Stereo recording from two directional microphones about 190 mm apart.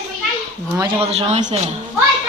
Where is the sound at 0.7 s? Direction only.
30° right (ahead or behind).